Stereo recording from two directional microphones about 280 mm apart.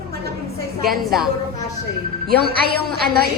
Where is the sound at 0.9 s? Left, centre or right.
Centre.